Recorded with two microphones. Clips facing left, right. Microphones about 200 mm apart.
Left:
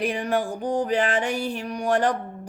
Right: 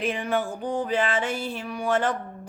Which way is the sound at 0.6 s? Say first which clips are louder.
Left 2 dB; 15° left (ahead or behind).